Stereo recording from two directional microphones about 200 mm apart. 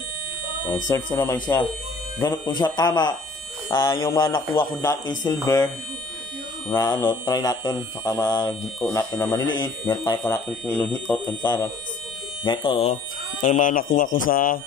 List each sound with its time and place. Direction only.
0.7 s speech: 15° left (ahead or behind)
6.7 s speech: 15° left (ahead or behind)
10.7 s speech: 5° left (ahead or behind)
12.4 s speech: 25° left (ahead or behind)
13.4 s speech: 40° left (ahead or behind)